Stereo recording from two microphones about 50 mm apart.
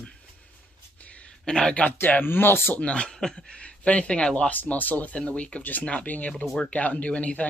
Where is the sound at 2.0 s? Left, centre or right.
Left.